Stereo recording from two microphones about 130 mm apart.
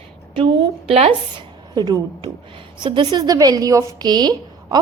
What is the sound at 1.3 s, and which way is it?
A woman's voice, 30° right (ahead or behind).